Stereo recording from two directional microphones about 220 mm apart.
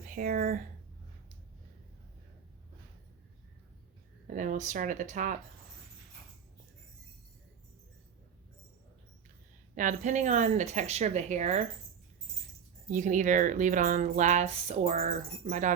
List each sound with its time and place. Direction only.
0.0 s speech: 40° right (ahead or behind)
4.3 s speech: 35° right (ahead or behind)
9.7 s speech: 35° right (ahead or behind)
12.9 s speech: 35° right (ahead or behind)